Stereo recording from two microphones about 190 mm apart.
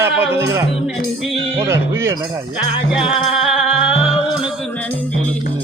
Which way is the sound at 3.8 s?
30° left (ahead or behind).